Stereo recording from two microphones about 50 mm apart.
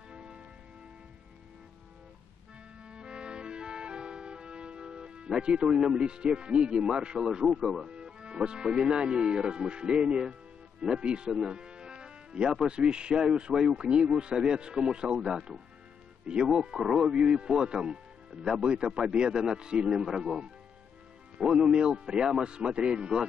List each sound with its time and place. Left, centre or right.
0.1 s music: centre
2.8 s music: centre
7.8 s speech: centre